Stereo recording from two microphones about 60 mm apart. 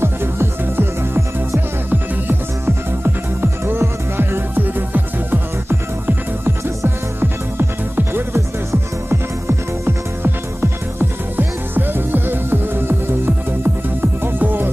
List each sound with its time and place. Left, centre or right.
0.0 s music: right